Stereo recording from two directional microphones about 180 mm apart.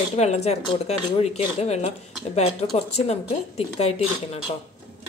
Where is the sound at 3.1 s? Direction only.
35° left (ahead or behind).